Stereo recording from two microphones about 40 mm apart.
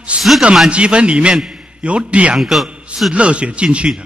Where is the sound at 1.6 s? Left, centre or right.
Right.